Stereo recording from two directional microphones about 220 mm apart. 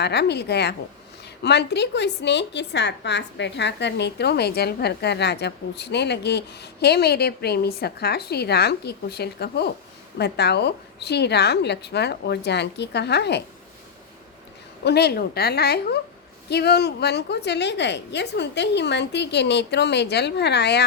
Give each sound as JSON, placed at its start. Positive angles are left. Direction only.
{"t": 0.0, "sound": "a woman's voice", "side_deg": 50}
{"t": 14.8, "sound": "a woman's voice", "side_deg": 45}